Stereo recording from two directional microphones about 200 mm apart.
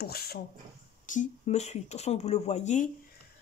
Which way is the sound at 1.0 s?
40° left (ahead or behind).